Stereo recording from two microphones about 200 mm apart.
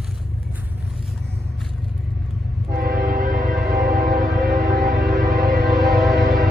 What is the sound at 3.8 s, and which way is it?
Music, centre (ahead or behind).